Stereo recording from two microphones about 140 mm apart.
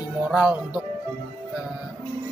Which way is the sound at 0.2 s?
10° right (ahead or behind).